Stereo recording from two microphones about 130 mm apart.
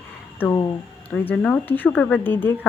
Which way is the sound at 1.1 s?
15° left (ahead or behind).